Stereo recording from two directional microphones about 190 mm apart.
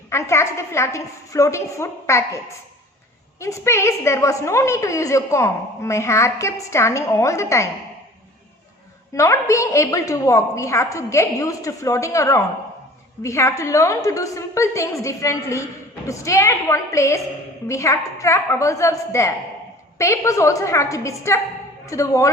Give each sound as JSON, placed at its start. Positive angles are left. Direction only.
{"t": 0.1, "sound": "a woman's voice", "side_deg": 15}
{"t": 3.4, "sound": "a woman's voice", "side_deg": 15}
{"t": 9.1, "sound": "a woman's voice", "side_deg": 15}